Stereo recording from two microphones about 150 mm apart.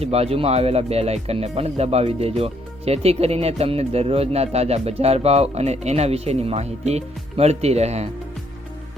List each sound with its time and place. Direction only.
0.0 s speech: 45° right (ahead or behind)